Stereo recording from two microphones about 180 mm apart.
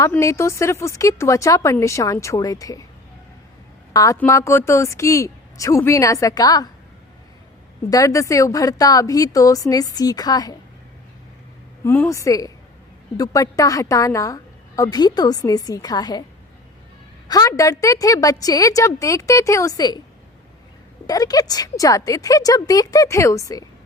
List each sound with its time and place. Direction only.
0.0 s speech: 15° left (ahead or behind)
3.9 s a woman's voice: 20° left (ahead or behind)
7.9 s a woman's voice: 20° left (ahead or behind)
11.8 s a woman's voice: 15° left (ahead or behind)
17.2 s a woman's voice: 20° left (ahead or behind)
21.1 s a woman's voice: 20° left (ahead or behind)